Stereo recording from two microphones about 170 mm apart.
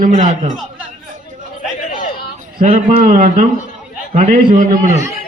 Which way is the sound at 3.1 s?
55° right (ahead or behind).